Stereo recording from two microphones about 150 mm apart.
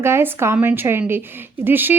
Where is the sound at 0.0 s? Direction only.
15° right (ahead or behind).